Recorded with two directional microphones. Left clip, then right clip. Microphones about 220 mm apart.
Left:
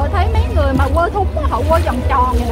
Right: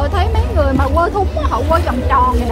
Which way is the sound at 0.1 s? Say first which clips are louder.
Right 1 dB; 20° right (ahead or behind).